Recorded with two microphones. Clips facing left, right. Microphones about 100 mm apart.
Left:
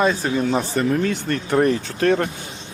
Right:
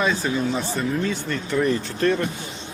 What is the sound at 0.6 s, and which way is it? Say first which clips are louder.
Speech: left 4 dB; 65° left (ahead or behind).